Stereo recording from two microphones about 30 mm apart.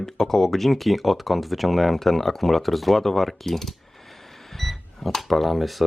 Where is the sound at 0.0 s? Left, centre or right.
Centre.